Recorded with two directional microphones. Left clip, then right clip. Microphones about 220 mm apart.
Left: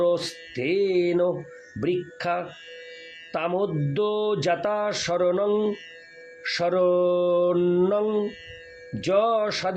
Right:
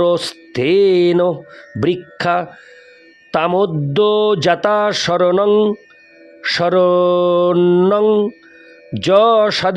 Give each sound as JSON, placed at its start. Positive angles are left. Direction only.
{"t": 0.0, "sound": "speech", "side_deg": -50}